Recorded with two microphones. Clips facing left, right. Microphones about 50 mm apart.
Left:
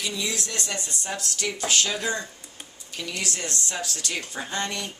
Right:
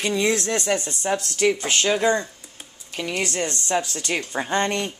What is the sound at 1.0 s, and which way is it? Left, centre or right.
Speech, right.